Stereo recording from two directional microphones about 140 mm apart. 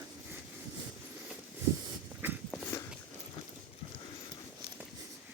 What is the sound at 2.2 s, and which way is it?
Walk, 15° right (ahead or behind).